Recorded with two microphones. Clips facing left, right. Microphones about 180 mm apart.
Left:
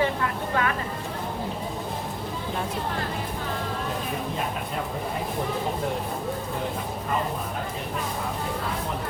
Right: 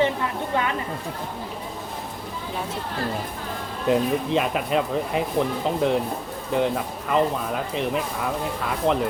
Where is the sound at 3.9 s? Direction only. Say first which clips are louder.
Right 9 dB; 80° right.